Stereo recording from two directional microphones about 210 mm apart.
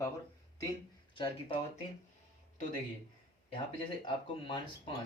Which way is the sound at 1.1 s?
25° left (ahead or behind).